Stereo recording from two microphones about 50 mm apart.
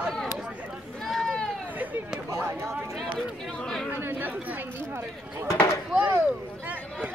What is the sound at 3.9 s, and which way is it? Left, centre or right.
Chatter, right.